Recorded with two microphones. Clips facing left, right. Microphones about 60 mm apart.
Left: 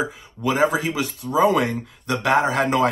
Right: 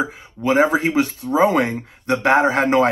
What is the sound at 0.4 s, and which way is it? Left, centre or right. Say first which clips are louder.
Speech: right 4 dB; right.